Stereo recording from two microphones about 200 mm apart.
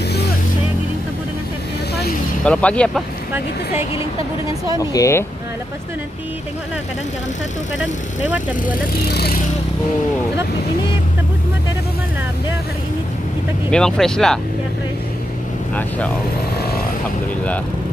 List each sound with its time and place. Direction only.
2.4 s speech: 5° left (ahead or behind)
4.7 s speech: 15° left (ahead or behind)
7.8 s speech: 10° right (ahead or behind)
8.6 s speech: 50° left (ahead or behind)
13.7 s speech: 5° left (ahead or behind)